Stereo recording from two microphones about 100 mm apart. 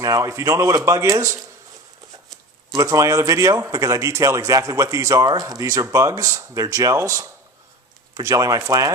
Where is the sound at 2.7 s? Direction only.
35° right (ahead or behind).